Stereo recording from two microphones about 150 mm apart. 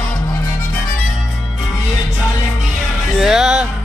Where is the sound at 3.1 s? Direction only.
5° right (ahead or behind).